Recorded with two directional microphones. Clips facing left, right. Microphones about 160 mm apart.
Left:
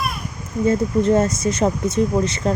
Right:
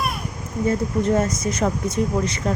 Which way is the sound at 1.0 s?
25° left (ahead or behind).